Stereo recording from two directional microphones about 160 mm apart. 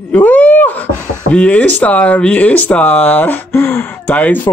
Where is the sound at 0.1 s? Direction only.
10° left (ahead or behind).